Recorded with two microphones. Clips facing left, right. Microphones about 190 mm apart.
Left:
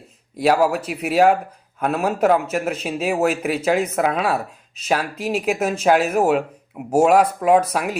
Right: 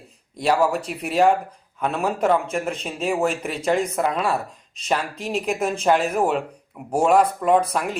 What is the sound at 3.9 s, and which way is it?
Speech, 60° left (ahead or behind).